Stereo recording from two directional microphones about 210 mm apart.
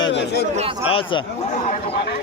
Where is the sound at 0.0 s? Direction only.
60° left (ahead or behind).